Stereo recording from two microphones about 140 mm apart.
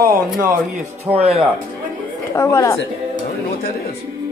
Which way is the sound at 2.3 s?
20° left (ahead or behind).